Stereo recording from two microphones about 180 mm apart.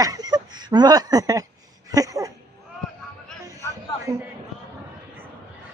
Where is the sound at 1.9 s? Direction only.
20° right (ahead or behind).